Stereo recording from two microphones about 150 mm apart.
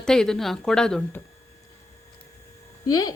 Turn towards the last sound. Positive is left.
turn(degrees=25)  # may be behind; listen again after turning